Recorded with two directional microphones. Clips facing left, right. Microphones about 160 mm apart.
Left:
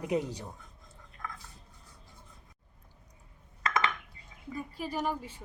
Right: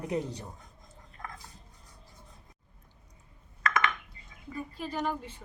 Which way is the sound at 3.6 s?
30° left (ahead or behind).